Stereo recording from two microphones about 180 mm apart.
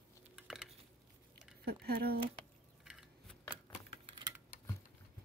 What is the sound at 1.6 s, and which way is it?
Speech, 60° right (ahead or behind).